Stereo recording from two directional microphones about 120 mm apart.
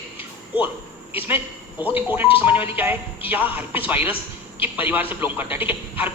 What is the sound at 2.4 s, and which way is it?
Speech, 15° right (ahead or behind).